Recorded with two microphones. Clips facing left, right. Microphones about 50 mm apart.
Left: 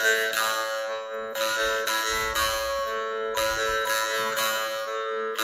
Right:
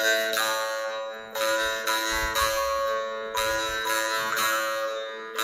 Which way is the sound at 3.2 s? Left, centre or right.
Left.